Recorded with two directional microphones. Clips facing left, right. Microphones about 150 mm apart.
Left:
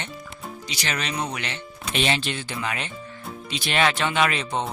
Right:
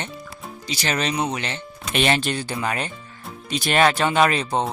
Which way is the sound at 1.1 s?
25° right (ahead or behind).